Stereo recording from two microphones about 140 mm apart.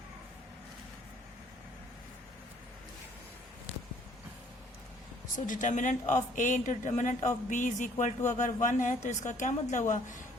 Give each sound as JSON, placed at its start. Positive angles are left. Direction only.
{"t": 5.5, "sound": "speech", "side_deg": 65}